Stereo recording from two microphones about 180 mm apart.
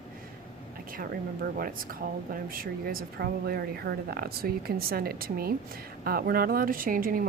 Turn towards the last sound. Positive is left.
turn(degrees=-50)  # may be behind; listen again after turning